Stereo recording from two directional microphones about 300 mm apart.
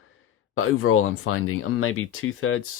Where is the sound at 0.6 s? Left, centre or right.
Left.